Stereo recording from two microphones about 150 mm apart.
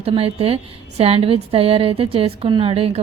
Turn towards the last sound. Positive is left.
turn(degrees=-40)  # may be behind; listen again after turning